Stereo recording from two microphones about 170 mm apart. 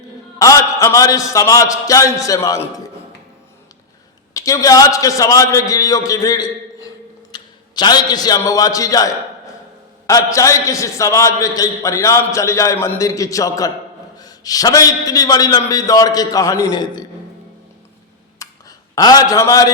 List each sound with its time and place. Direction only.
0.3 s a man's voice: 20° left (ahead or behind)
4.4 s a man's voice: 20° left (ahead or behind)
18.4 s a sound: 20° left (ahead or behind)
18.9 s a man's voice: 20° left (ahead or behind)